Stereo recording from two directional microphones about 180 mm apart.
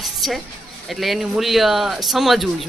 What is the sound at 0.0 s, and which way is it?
Music, centre (ahead or behind).